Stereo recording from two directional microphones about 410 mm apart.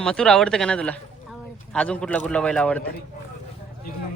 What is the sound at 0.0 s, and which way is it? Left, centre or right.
Speech, centre.